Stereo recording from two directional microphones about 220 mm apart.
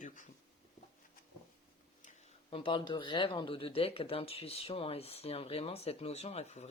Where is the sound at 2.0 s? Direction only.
25° left (ahead or behind).